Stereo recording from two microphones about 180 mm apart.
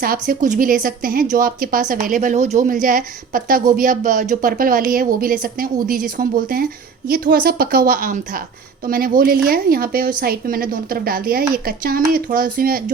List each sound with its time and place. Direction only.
0.0 s a woman's voice: 55° right (ahead or behind)